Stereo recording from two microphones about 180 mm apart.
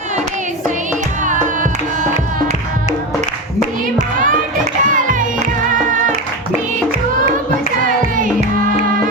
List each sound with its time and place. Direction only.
4.8 s music: 45° right (ahead or behind)